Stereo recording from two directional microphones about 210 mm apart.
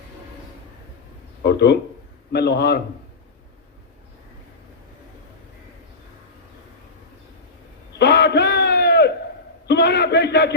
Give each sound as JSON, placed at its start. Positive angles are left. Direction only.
{"t": 1.4, "sound": "a man's voice", "side_deg": 50}
{"t": 7.9, "sound": "a sound", "side_deg": 55}
{"t": 9.6, "sound": "a man's voice", "side_deg": 50}